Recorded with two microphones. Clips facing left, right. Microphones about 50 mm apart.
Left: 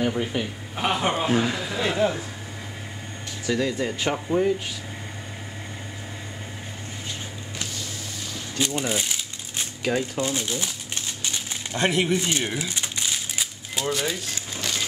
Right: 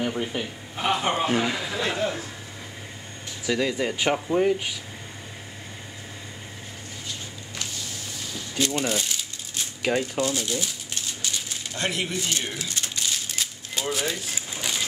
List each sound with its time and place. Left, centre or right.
0.0 s a man's voice: centre
0.7 s speech: centre
1.1 s a man's voice: centre
1.8 s speech: centre
3.4 s speech: centre
8.5 s speech: centre
9.9 s a man's voice: centre
10.2 s speech: left
11.7 s crumpling: left
13.8 s a man's voice: centre
14.3 s typewriter: centre